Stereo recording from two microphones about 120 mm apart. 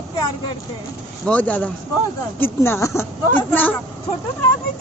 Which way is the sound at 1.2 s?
10° left (ahead or behind).